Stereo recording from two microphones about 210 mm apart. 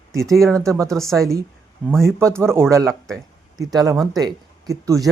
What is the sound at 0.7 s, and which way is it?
Speech, 15° right (ahead or behind).